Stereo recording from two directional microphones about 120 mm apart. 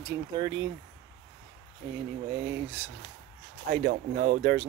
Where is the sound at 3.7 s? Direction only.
90° right.